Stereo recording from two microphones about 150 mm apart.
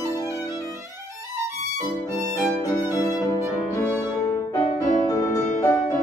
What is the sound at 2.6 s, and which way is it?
Music, 25° left (ahead or behind).